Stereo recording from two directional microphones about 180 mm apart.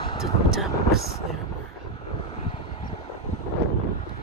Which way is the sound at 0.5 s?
Centre (ahead or behind).